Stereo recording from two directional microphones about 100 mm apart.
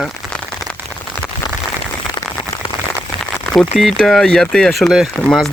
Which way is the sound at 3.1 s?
55° right (ahead or behind).